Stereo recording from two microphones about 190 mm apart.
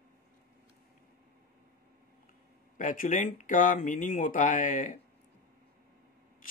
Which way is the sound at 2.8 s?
45° left (ahead or behind).